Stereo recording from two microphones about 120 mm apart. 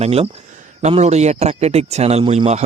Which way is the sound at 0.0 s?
55° right (ahead or behind).